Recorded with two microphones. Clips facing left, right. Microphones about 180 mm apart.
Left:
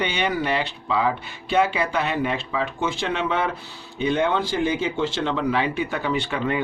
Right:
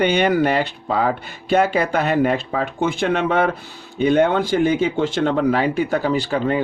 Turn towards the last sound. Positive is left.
turn(degrees=-35)  # may be behind; listen again after turning